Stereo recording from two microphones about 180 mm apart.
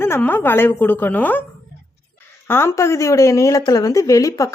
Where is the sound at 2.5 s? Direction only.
15° left (ahead or behind).